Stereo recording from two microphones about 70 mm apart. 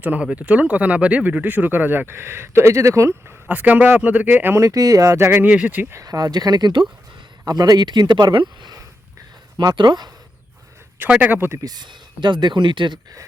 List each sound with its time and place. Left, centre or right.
0.0 s speech: centre; by 3.3 s right
3.5 s speech: right
4.5 s speech: right
5.2 s speech: right
6.1 s speech: right
7.4 s speech: right
11.1 s speech: right
11.3 s speech: right
11.6 s speech: right